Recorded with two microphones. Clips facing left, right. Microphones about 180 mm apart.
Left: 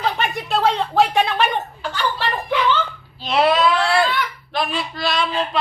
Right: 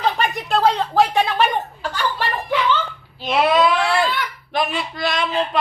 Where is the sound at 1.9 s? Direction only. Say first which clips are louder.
Even; 10° right (ahead or behind).